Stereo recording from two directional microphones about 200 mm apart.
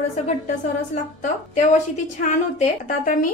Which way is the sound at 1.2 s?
40° left (ahead or behind).